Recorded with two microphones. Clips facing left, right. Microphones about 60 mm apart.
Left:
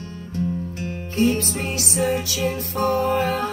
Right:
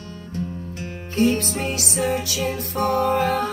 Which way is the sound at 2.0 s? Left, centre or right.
Left.